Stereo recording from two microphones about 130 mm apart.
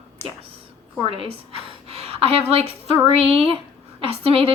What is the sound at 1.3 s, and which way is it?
A woman's voice, 50° right (ahead or behind).